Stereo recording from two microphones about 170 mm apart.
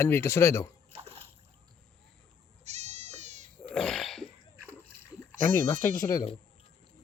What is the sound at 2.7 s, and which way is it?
Goat, 40° right (ahead or behind).